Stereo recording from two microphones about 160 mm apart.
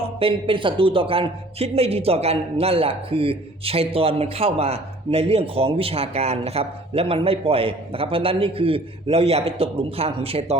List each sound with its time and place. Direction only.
0.2 s speech: 35° right (ahead or behind)